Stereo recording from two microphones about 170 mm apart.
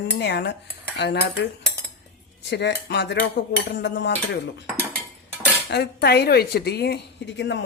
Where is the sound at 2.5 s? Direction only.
90° left.